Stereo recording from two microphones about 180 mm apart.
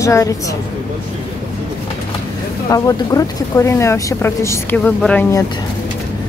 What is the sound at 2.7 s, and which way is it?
Speech, 20° left (ahead or behind).